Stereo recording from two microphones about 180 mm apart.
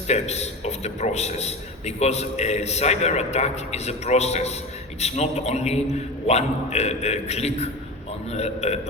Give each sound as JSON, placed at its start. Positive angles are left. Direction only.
{"t": 0.1, "sound": "a man's voice", "side_deg": 35}